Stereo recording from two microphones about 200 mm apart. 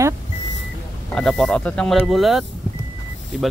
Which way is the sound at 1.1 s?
5° left (ahead or behind).